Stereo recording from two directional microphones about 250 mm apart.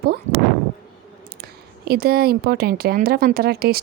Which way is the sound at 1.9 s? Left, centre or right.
Right.